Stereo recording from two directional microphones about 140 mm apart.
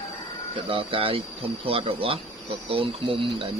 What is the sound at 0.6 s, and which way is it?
Speech, 40° right (ahead or behind).